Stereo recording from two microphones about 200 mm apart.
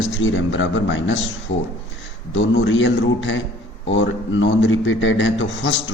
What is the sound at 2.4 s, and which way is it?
A man's voice, 70° left (ahead or behind).